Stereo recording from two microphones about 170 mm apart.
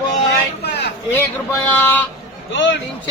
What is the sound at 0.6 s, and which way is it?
Vehicle, 75° left (ahead or behind).